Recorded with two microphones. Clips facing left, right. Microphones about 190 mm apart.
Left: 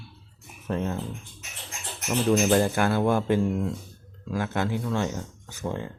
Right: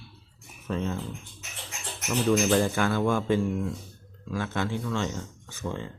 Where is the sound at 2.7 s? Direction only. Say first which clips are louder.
Left 2 dB; 15° left (ahead or behind).